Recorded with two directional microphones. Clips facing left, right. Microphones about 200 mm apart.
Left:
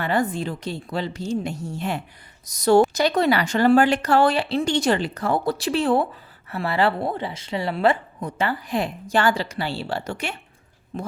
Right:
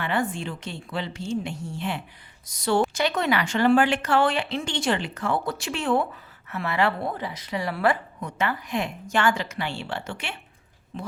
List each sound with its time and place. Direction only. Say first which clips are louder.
0.0 s a woman's voice: left 4 dB; 40° left (ahead or behind)